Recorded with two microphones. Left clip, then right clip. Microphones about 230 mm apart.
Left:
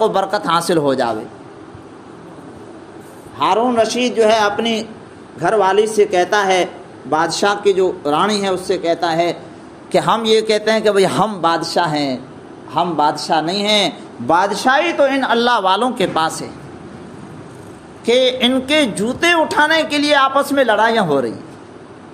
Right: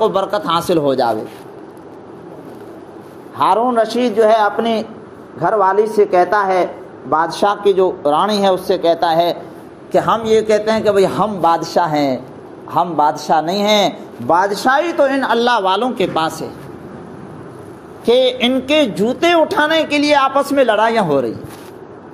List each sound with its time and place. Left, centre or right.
0.0 s speech: centre
3.3 s a man's voice: centre
4.3 s a man's voice: centre
9.9 s a man's voice: left
11.4 s a man's voice: centre
14.2 s speech: centre
14.5 s a man's voice: centre
18.0 s a man's voice: centre